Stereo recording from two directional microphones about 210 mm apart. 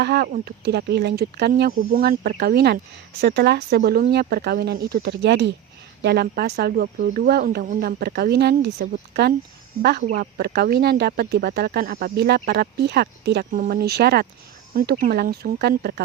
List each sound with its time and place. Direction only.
0.0 s speech: 50° right (ahead or behind)
10.0 s speech: 40° right (ahead or behind)
14.8 s speech: 40° right (ahead or behind)